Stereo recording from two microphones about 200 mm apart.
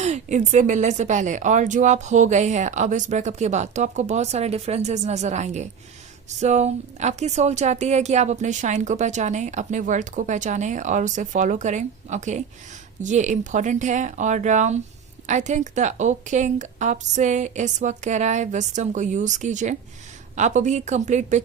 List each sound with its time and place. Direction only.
0.0 s a woman's voice: 35° right (ahead or behind)